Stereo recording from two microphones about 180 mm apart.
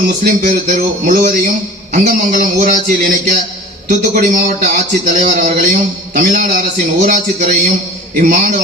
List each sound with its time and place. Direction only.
0.3 s a man's voice: 50° right (ahead or behind)